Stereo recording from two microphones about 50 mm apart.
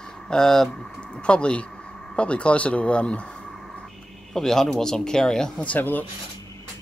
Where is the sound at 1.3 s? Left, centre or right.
Left.